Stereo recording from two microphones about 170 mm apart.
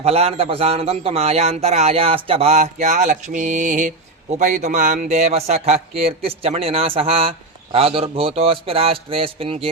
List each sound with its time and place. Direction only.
0.0 s speech: 35° right (ahead or behind)